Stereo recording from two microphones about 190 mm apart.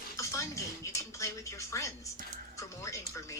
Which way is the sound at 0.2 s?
15° left (ahead or behind).